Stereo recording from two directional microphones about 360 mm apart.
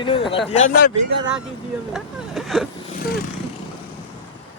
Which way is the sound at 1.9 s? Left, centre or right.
Centre.